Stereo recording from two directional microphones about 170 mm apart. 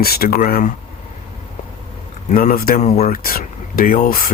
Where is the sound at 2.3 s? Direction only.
55° left (ahead or behind).